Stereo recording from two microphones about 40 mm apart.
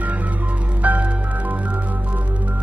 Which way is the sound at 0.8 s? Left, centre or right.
Right.